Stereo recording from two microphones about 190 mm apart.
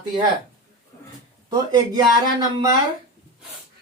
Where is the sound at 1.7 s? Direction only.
20° right (ahead or behind).